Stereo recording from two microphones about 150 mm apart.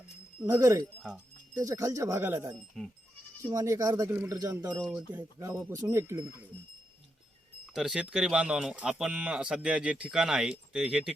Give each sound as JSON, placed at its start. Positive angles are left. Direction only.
{"t": 0.4, "sound": "speech", "side_deg": -20}
{"t": 4.8, "sound": "speech", "side_deg": -5}
{"t": 5.4, "sound": "speech", "side_deg": -20}
{"t": 7.7, "sound": "speech", "side_deg": -5}